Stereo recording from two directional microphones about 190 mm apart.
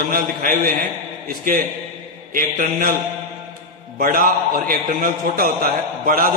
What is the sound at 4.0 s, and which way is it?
A man's voice, 50° right (ahead or behind).